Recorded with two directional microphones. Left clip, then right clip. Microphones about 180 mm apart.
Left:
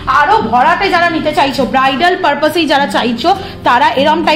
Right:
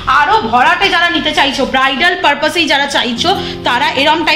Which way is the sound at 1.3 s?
55° left (ahead or behind).